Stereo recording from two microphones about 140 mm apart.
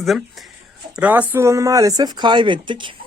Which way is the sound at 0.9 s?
10° right (ahead or behind).